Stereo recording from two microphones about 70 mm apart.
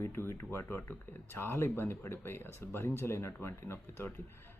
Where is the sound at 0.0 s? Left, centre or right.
Left.